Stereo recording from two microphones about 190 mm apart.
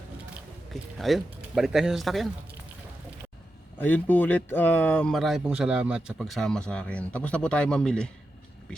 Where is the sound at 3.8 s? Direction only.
10° left (ahead or behind).